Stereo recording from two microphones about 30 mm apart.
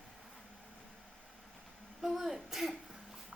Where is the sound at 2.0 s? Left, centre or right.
Centre.